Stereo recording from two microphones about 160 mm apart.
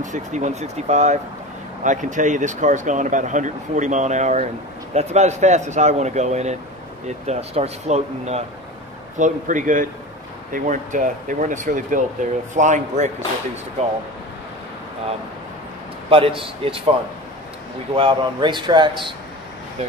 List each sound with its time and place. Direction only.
0.0 s speech: 50° right (ahead or behind)
9.2 s speech: 55° right (ahead or behind)
16.1 s speech: 35° right (ahead or behind)
17.9 s speech: 30° right (ahead or behind)